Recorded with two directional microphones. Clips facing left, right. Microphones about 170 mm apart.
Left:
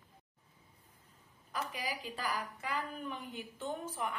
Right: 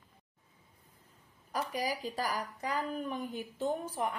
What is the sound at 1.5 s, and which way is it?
A woman's voice, 40° right (ahead or behind).